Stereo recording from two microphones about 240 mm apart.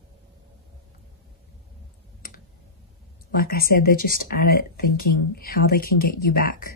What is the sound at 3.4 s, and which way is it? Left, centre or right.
Speech, left.